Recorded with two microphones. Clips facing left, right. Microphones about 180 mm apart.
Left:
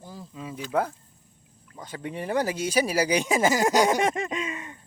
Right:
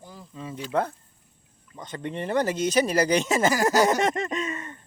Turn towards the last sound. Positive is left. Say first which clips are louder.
# right 2 dB
turn(degrees=10)  # may be behind; listen again after turning